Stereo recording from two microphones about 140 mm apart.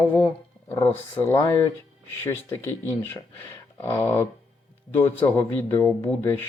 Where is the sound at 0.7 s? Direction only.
20° left (ahead or behind).